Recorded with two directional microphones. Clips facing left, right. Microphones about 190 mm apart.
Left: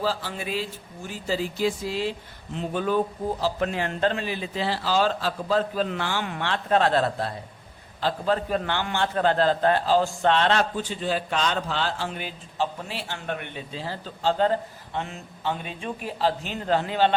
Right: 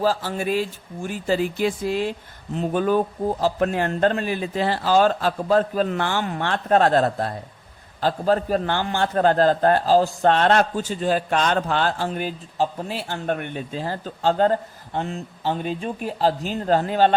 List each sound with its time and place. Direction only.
0.0 s a man's voice: 45° right (ahead or behind)
14.9 s speech: 35° right (ahead or behind)